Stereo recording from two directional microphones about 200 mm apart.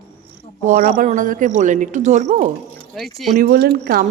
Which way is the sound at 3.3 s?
45° right (ahead or behind).